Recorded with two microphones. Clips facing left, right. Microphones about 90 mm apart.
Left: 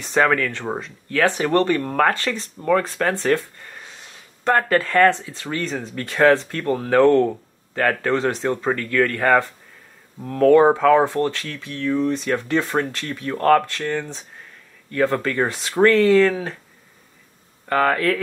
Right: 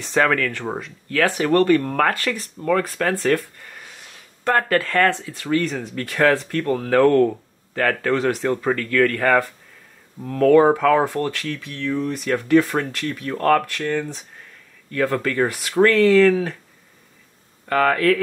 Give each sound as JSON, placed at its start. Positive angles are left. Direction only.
{"t": 0.0, "sound": "speech", "side_deg": 25}
{"t": 17.6, "sound": "speech", "side_deg": 30}